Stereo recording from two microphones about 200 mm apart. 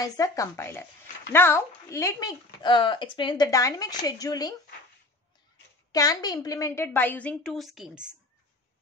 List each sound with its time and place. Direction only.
0.0 s a woman's voice: 15° left (ahead or behind)
5.9 s a woman's voice: 20° left (ahead or behind); by 8.1 s 5° right (ahead or behind)